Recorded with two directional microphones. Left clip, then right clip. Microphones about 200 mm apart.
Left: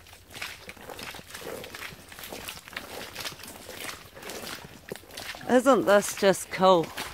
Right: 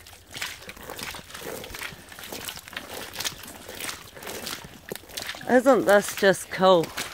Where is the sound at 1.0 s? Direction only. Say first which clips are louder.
Right 3 dB; 50° right (ahead or behind).